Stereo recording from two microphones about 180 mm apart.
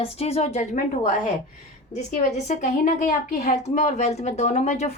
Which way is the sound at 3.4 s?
40° left (ahead or behind).